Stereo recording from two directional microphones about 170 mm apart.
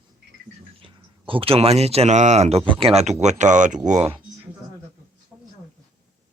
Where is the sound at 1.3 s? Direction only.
35° right (ahead or behind).